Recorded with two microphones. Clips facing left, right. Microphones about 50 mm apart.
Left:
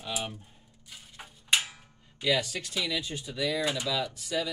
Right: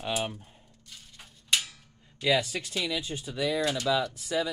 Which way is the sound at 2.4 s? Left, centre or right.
Right.